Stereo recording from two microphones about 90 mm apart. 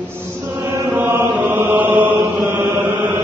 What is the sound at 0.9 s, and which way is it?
Chant, 20° right (ahead or behind).